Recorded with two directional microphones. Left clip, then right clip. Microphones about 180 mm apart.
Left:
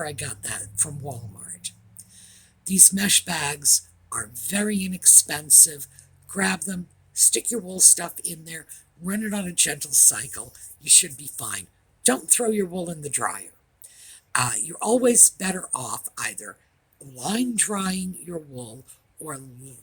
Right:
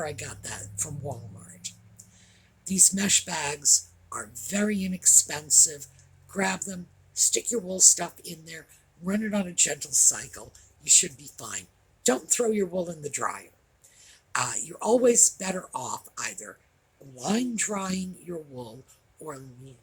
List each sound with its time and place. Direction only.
0.0 s speech: 45° left (ahead or behind)
1.6 s a sound: 45° left (ahead or behind)
2.1 s speech: 45° left (ahead or behind)